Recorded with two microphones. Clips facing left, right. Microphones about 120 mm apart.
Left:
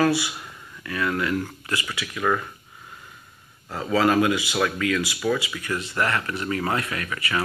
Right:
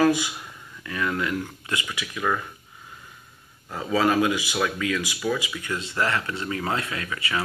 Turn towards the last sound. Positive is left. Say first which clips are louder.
# left 1 dB
turn(degrees=-20)  # may be behind; listen again after turning